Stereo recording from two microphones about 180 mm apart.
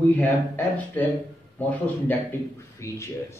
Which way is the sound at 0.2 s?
10° left (ahead or behind).